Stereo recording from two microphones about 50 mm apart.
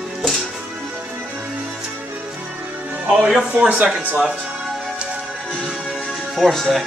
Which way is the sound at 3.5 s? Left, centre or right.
Right.